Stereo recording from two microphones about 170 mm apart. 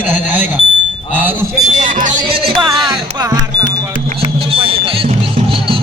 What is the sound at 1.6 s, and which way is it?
Speech, 50° right (ahead or behind).